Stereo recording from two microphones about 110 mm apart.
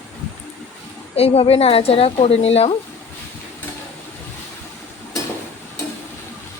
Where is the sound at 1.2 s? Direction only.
65° left (ahead or behind).